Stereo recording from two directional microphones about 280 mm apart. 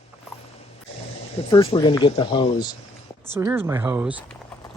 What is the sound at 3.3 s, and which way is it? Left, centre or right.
Speech, centre.